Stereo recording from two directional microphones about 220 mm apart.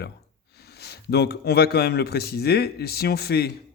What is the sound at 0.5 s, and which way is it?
A man's voice, 45° left (ahead or behind).